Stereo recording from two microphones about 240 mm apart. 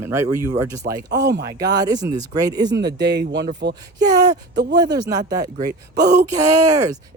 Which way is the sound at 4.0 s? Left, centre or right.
Centre.